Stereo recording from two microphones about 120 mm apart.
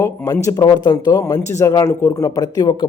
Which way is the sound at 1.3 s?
25° left (ahead or behind).